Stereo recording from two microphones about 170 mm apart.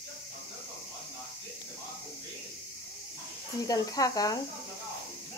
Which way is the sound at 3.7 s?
20° left (ahead or behind).